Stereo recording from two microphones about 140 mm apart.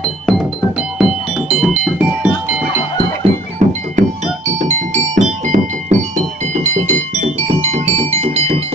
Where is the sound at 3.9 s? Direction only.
55° right (ahead or behind).